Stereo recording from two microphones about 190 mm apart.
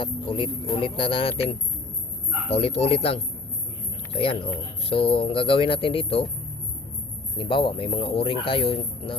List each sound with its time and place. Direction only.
0.0 s speech: 25° left (ahead or behind)
2.6 s speech: 30° left (ahead or behind)
7.3 s speech: 25° left (ahead or behind)